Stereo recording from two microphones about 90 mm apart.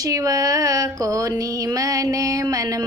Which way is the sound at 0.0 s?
40° right (ahead or behind).